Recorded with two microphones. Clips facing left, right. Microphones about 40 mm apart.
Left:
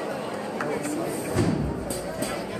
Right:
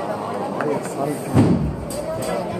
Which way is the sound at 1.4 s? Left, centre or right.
Right.